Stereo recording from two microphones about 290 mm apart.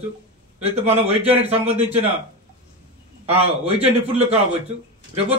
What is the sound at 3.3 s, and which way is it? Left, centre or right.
A man's voice, centre.